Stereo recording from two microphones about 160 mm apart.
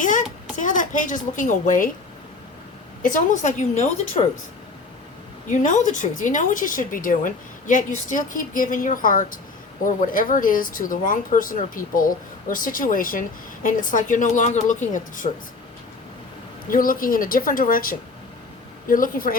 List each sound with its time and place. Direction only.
0.6 s a woman's voice: 50° left (ahead or behind)
3.0 s a woman's voice: 55° left (ahead or behind)
5.5 s speech: 50° left (ahead or behind)
16.6 s speech: 60° left (ahead or behind)